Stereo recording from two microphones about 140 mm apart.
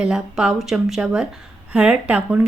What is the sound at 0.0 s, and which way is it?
A woman's voice, 5° right (ahead or behind).